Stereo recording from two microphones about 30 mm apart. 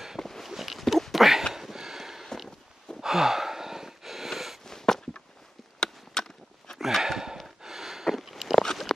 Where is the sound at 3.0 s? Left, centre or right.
Centre.